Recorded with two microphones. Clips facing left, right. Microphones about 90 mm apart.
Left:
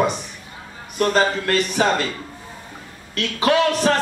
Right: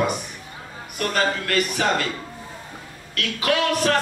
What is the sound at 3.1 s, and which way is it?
Speech, 30° left (ahead or behind).